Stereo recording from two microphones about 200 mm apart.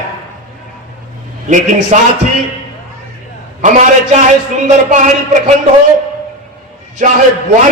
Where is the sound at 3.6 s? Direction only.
40° right (ahead or behind).